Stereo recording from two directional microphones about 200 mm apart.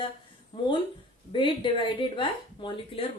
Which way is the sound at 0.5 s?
25° left (ahead or behind).